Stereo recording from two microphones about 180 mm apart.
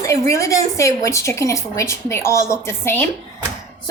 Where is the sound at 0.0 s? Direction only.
15° left (ahead or behind).